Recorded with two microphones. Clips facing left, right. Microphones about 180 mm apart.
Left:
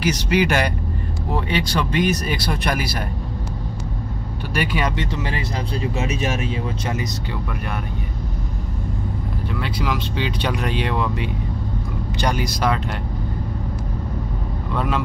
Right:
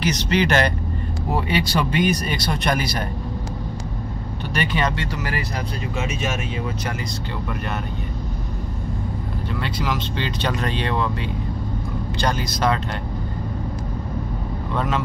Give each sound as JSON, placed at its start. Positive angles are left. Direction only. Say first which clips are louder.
{"t": 0.0, "sound": "speech", "louder": "left 1 dB", "side_deg": 10}
{"t": 1.3, "sound": "speech", "louder": "right 1 dB", "side_deg": -5}
{"t": 4.6, "sound": "speech", "louder": "even", "side_deg": 5}
{"t": 4.9, "sound": "speech", "louder": "left 1 dB", "side_deg": 25}
{"t": 9.6, "sound": "speech", "louder": "left 1 dB", "side_deg": 5}